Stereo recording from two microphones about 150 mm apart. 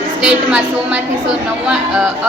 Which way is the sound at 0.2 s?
5° right (ahead or behind).